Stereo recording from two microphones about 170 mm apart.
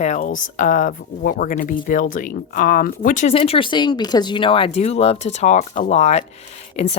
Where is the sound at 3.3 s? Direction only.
35° left (ahead or behind).